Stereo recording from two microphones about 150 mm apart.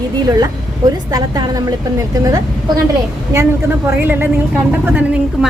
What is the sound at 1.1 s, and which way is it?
Speech, 25° right (ahead or behind).